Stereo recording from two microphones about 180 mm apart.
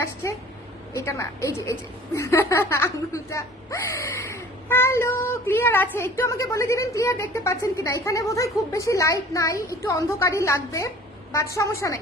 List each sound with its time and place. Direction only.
0.9 s speech: 15° left (ahead or behind)